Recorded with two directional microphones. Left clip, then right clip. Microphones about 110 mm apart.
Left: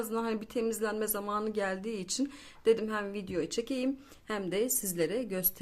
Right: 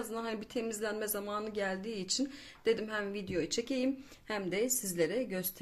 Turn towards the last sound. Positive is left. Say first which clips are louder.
# left 1 dB
turn(degrees=30)  # may be behind; listen again after turning